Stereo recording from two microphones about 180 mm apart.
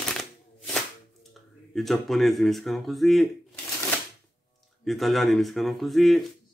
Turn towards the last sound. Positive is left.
turn(degrees=0)  # may be behind; listen again after turning